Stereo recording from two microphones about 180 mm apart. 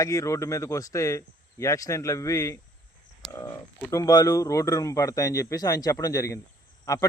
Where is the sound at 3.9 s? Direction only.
20° left (ahead or behind).